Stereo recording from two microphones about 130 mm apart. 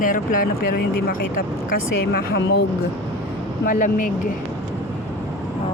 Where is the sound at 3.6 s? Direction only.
90° left.